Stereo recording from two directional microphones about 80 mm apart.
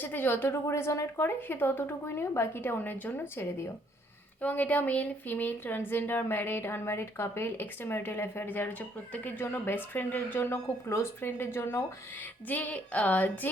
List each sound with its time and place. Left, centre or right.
0.0 s speech: left
12.5 s speech: centre